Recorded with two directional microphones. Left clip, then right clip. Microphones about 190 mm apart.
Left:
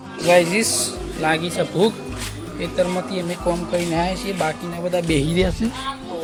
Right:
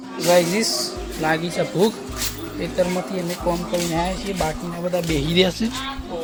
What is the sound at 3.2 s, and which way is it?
Speech, 15° left (ahead or behind).